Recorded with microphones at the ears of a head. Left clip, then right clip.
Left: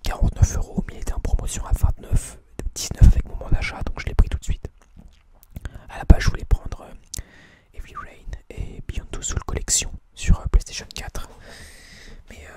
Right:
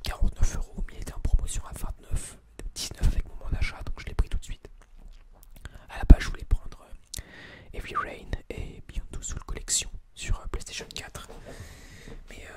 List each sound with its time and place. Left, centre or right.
0.1 s whispering: left
6.1 s whispering: left
7.7 s whispering: right
8.7 s whispering: left
11.5 s a sound: left